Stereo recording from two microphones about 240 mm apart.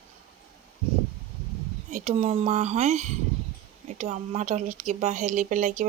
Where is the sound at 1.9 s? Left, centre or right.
Right.